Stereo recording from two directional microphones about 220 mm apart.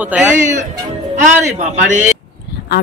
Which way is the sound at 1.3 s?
35° right (ahead or behind).